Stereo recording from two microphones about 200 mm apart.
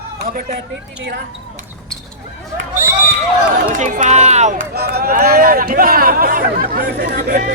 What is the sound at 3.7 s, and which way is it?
Speech, 40° right (ahead or behind).